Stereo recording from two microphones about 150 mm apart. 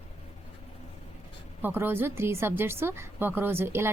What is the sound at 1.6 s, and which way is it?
A woman's voice, 15° right (ahead or behind).